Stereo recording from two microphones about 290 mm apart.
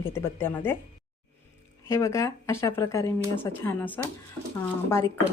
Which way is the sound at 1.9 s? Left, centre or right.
Centre.